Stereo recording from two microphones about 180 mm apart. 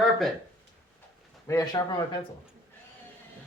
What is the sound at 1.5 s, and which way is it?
Speech, 20° left (ahead or behind).